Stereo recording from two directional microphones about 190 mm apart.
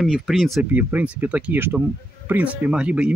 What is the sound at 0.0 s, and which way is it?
Speech, centre (ahead or behind).